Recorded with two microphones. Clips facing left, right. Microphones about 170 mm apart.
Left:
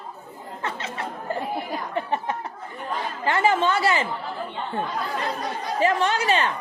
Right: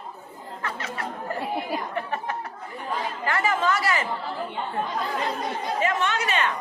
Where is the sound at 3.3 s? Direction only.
30° left (ahead or behind).